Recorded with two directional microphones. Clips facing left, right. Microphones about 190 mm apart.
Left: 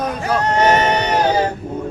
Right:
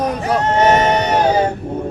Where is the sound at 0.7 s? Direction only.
30° right (ahead or behind).